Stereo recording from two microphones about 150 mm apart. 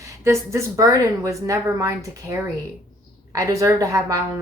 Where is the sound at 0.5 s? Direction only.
20° right (ahead or behind).